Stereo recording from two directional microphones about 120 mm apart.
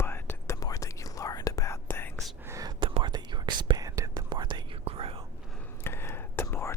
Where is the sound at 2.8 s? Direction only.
45° right (ahead or behind).